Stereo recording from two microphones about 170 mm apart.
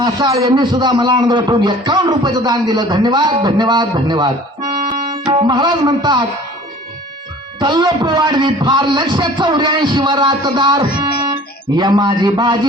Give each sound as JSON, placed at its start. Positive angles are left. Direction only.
{"t": 0.0, "sound": "a man's voice", "side_deg": -25}
{"t": 7.6, "sound": "a man's voice", "side_deg": -25}